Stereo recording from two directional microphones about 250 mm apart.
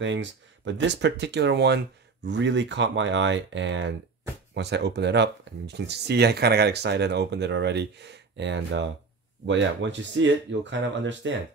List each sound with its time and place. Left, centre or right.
0.0 s speech: right